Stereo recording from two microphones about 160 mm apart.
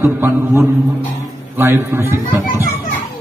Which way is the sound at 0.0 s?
15° right (ahead or behind).